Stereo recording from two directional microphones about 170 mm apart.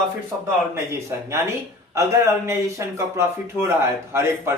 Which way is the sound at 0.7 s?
15° right (ahead or behind).